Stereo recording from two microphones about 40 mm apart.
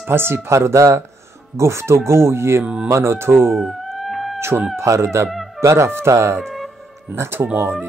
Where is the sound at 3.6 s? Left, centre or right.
Centre.